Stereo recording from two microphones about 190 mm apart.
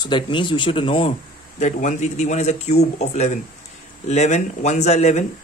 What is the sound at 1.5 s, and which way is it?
Speech, 40° left (ahead or behind).